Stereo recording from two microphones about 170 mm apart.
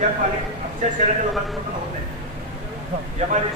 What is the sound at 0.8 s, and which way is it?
Speech, 45° right (ahead or behind).